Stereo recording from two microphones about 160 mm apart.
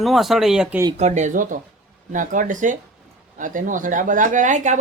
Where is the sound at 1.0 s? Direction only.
45° right (ahead or behind).